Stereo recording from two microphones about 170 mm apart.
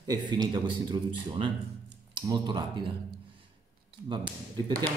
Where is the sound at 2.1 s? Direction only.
25° right (ahead or behind).